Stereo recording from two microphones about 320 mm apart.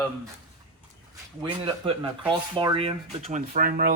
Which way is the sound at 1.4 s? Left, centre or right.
Centre.